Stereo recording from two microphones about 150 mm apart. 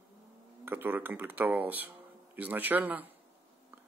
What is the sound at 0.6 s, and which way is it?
Speech, 15° right (ahead or behind).